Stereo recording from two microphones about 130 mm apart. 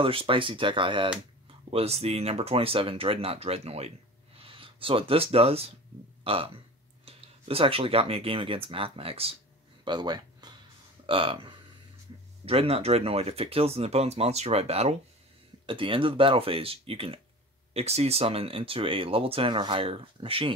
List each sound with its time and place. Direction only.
0.0 s speech: 45° right (ahead or behind)
1.7 s speech: 50° right (ahead or behind)
4.4 s speech: 45° right (ahead or behind)
9.8 s a sound: 35° right (ahead or behind)
11.1 s speech: 45° right (ahead or behind)
15.6 s speech: 40° right (ahead or behind)